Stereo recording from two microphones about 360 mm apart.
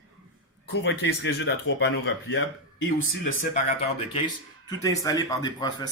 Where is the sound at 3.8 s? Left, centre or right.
Centre.